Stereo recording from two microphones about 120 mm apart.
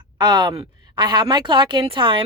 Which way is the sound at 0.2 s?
40° right (ahead or behind).